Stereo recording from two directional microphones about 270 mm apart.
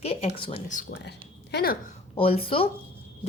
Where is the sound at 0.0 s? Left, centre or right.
Left.